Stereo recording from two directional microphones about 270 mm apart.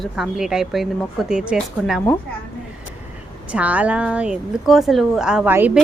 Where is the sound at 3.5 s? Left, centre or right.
Centre.